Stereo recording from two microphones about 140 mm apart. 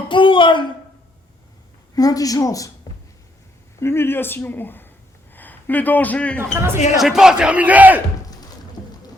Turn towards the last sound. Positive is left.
turn(degrees=-10)  # may be behind; listen again after turning